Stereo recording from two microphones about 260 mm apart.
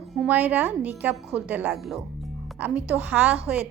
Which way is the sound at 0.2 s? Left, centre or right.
Centre.